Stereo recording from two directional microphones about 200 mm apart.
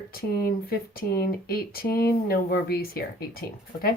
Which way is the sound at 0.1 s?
50° left (ahead or behind).